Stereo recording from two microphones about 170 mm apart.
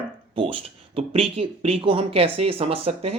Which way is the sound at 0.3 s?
35° right (ahead or behind).